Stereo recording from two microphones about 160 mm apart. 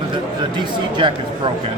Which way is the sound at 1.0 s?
30° right (ahead or behind).